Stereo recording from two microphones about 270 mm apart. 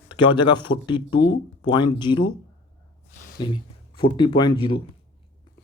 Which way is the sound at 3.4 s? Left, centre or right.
Centre.